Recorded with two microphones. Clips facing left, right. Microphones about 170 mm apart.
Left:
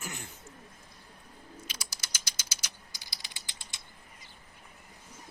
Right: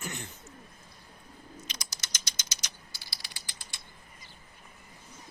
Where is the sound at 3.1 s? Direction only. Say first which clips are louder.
Right 1 dB; 20° left (ahead or behind).